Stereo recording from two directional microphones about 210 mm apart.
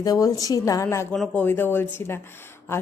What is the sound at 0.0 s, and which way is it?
A woman's voice, 15° left (ahead or behind).